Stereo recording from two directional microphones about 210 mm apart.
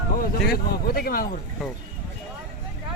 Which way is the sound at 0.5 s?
45° left (ahead or behind).